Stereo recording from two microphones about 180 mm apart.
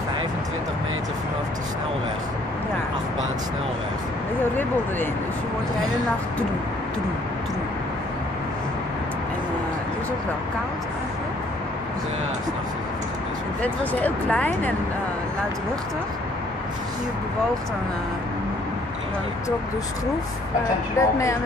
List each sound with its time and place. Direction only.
13.6 s speech: 10° left (ahead or behind)
21.0 s speech: 15° left (ahead or behind)